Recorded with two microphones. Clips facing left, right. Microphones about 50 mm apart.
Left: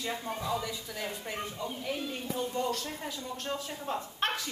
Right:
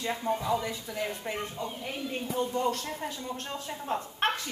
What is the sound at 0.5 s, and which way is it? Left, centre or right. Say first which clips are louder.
Speech: right 1 dB; right.